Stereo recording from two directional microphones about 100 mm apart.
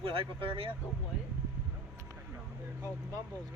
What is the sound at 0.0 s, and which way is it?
Speech, 65° right (ahead or behind).